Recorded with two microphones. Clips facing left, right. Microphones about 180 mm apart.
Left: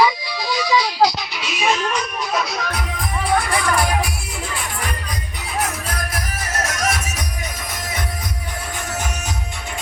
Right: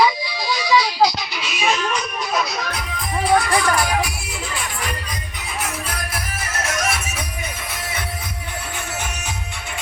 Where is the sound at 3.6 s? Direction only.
55° left (ahead or behind).